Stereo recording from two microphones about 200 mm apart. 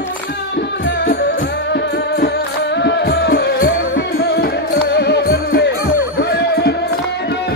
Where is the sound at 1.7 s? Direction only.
55° left (ahead or behind).